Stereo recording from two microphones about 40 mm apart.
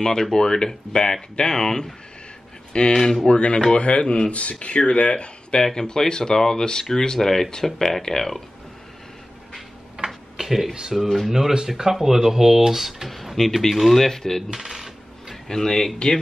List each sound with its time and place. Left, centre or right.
0.0 s speech: centre
2.9 s speech: centre
3.3 s speech: left; by 8.4 s centre
9.9 s tick-tock: centre
10.8 s speech: centre
14.5 s coin: centre
15.4 s speech: centre